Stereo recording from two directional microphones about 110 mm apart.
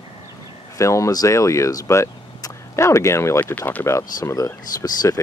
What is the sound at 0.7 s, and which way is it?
Speech, 30° left (ahead or behind).